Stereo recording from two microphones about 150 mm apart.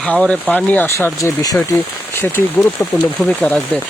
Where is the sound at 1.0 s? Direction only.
20° left (ahead or behind).